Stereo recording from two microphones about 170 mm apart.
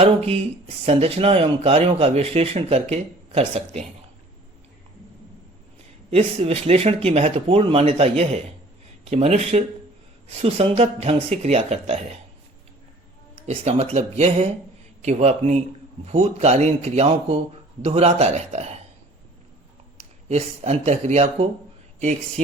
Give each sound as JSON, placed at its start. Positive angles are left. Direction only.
{"t": 0.0, "sound": "speech", "side_deg": -40}
{"t": 6.1, "sound": "speech", "side_deg": -35}
{"t": 13.5, "sound": "speech", "side_deg": -40}
{"t": 20.0, "sound": "speech", "side_deg": -40}